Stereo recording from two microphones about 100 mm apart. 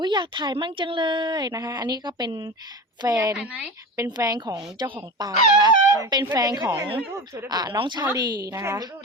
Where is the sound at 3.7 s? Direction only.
35° right (ahead or behind).